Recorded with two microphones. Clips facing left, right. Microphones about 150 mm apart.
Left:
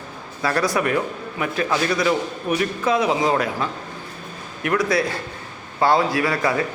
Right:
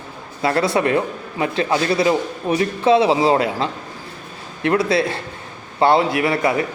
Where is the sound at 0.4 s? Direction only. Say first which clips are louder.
Right 3 dB; 25° right (ahead or behind).